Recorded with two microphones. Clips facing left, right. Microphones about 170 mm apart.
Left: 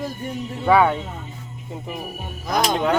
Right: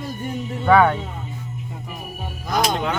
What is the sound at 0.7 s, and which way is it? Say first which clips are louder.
Speech: right 1 dB; 10° left (ahead or behind).